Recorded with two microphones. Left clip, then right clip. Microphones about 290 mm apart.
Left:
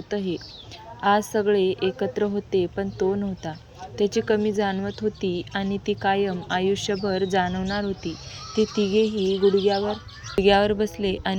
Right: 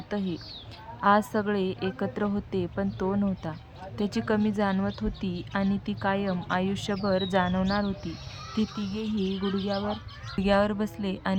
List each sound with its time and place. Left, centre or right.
0.1 s speech: centre
8.7 s speech: right
9.6 s speech: centre